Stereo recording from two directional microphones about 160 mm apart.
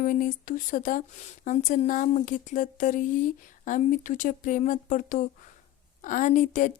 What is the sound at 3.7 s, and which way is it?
A woman's voice, 55° left (ahead or behind).